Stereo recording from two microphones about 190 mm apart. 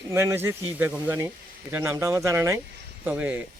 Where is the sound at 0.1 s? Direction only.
15° right (ahead or behind).